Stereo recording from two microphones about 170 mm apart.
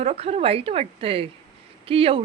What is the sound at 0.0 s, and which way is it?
A woman's voice, 40° right (ahead or behind).